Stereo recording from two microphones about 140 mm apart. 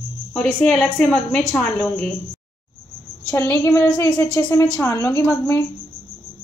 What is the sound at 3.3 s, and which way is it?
A woman's voice, 20° left (ahead or behind).